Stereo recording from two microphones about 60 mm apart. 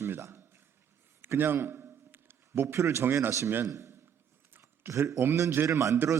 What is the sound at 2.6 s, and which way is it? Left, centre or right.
Speech, right.